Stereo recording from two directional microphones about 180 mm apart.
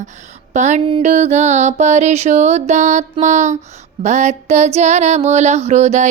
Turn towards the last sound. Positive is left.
turn(degrees=-40)  # may be behind; listen again after turning